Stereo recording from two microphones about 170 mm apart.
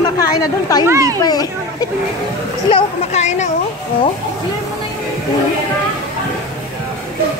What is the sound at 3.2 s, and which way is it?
Speech, 45° left (ahead or behind).